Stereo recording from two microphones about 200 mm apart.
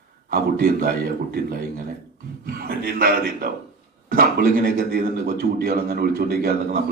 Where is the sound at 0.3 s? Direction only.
50° right (ahead or behind).